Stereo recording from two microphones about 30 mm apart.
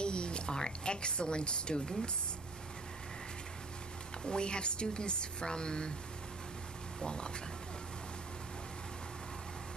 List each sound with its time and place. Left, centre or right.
0.0 s a sound: left
0.6 s a woman's voice: left
4.2 s speech: left
7.0 s a woman's voice: left